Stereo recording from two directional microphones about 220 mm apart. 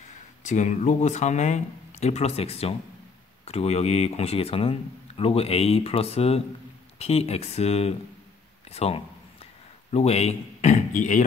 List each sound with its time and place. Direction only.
0.4 s speech: 35° left (ahead or behind)